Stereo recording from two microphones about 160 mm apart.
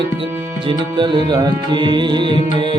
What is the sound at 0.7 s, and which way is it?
Music, 30° right (ahead or behind).